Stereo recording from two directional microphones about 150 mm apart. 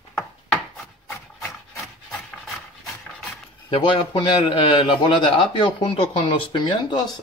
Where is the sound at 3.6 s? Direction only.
35° left (ahead or behind).